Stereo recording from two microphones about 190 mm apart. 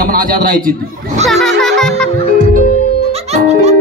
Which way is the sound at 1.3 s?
Centre (ahead or behind).